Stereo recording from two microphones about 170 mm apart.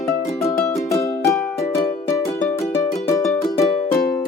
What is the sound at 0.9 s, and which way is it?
Music, 15° left (ahead or behind).